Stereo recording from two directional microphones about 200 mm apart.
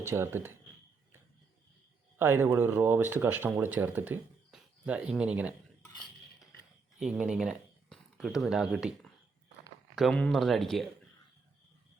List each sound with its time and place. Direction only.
0.0 s speech: 10° right (ahead or behind)
2.1 s speech: 10° right (ahead or behind)
7.0 s speech: 5° right (ahead or behind)